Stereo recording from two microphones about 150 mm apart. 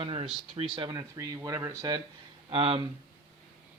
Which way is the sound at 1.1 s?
20° right (ahead or behind).